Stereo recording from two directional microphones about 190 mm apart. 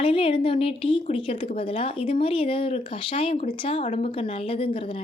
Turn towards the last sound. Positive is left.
turn(degrees=30)  # may be behind; listen again after turning